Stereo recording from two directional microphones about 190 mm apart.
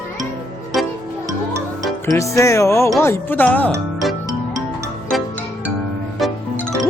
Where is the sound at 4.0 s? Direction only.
Centre (ahead or behind).